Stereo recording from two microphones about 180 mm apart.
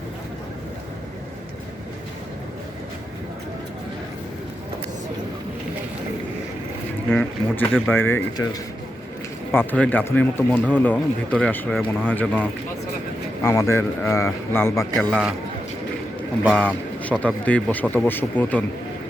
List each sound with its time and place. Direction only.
7.1 s speech: 10° left (ahead or behind)
9.5 s speech: 10° left (ahead or behind)
16.5 s speech: 10° left (ahead or behind)